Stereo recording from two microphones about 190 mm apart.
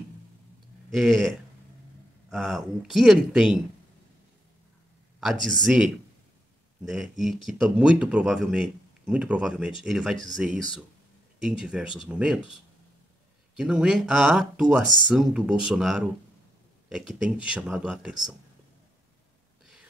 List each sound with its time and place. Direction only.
0.9 s speech: centre (ahead or behind)
5.2 s speech: centre (ahead or behind)
13.6 s speech: 5° right (ahead or behind)